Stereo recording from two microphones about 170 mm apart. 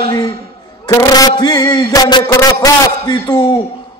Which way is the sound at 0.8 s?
20° left (ahead or behind).